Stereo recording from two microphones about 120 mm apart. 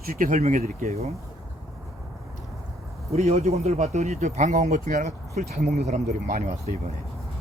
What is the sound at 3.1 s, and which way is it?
Speech, 60° right (ahead or behind).